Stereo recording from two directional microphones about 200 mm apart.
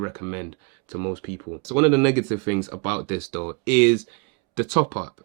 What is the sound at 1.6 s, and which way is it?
Speech, centre (ahead or behind).